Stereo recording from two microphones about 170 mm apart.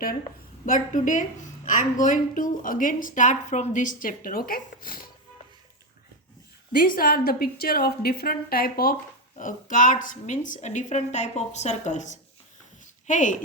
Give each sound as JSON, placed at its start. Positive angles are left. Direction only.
{"t": 0.3, "sound": "a woman's voice", "side_deg": 50}
{"t": 6.7, "sound": "a woman's voice", "side_deg": 55}
{"t": 9.4, "sound": "a woman's voice", "side_deg": 50}